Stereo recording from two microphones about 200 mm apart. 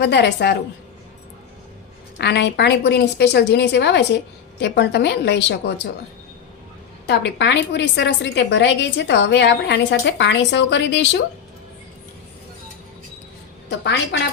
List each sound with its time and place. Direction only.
0.0 s a woman's voice: 60° left (ahead or behind)
2.1 s a woman's voice: 60° left (ahead or behind)
7.1 s a woman's voice: 60° left (ahead or behind)
13.7 s a woman's voice: 60° left (ahead or behind)